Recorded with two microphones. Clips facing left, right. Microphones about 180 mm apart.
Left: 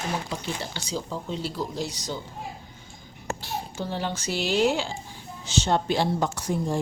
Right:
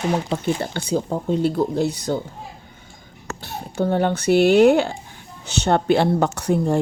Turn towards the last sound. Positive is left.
turn(degrees=-65)  # may be behind; listen again after turning